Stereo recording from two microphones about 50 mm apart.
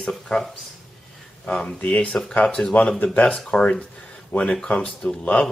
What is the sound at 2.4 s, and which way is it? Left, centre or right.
Speech, centre.